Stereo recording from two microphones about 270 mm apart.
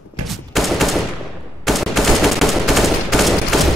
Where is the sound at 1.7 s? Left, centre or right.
Centre.